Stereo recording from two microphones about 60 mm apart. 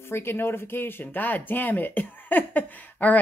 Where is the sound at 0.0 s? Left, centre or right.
Left.